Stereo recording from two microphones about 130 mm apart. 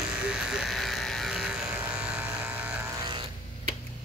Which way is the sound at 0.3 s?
5° right (ahead or behind).